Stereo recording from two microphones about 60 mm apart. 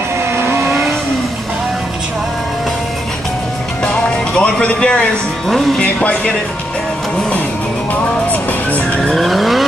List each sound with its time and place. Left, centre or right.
3.8 s music: left
5.8 s speech: centre
7.9 s vehicle: left
9.0 s vehicle: centre